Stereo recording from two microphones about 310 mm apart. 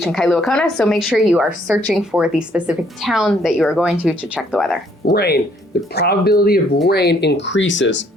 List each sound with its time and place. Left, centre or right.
0.0 s a woman's voice: centre
5.1 s speech: left